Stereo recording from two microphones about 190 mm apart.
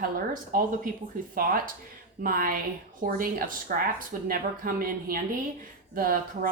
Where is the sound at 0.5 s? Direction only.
45° right (ahead or behind).